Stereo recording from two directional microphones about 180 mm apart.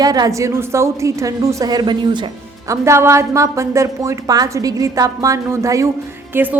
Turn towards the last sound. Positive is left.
turn(degrees=-10)  # may be behind; listen again after turning